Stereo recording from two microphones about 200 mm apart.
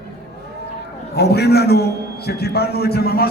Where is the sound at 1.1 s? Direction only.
55° left (ahead or behind).